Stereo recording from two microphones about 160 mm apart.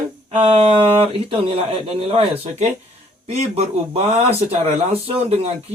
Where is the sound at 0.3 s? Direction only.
35° right (ahead or behind).